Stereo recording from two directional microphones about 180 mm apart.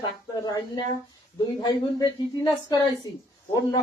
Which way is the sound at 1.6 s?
20° left (ahead or behind).